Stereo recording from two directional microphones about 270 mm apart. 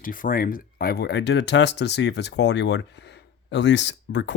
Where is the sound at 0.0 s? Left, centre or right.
Left.